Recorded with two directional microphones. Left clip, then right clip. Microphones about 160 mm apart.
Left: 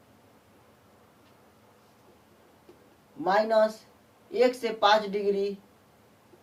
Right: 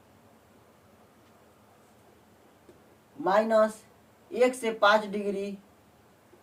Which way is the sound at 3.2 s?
25° right (ahead or behind).